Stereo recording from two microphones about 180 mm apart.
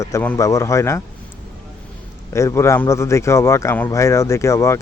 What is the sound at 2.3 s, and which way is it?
Speech, 15° left (ahead or behind).